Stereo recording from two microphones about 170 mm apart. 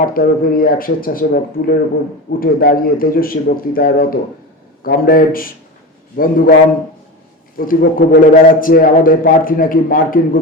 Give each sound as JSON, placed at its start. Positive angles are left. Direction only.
{"t": 0.0, "sound": "a man's voice", "side_deg": 60}
{"t": 7.6, "sound": "a man's voice", "side_deg": 55}